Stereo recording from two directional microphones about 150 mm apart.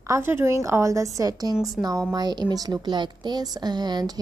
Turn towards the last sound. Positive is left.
turn(degrees=-30)  # may be behind; listen again after turning